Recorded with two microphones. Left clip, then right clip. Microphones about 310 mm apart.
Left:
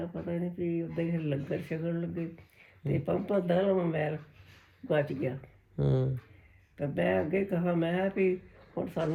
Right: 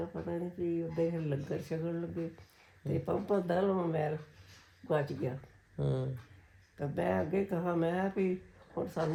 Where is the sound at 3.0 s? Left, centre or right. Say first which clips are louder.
Left 2 dB; centre.